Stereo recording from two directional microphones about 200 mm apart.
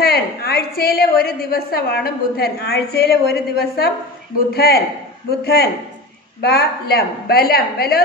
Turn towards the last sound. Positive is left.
turn(degrees=50)  # may be behind; listen again after turning